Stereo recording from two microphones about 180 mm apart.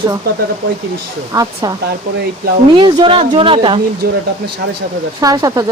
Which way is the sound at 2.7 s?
30° right (ahead or behind).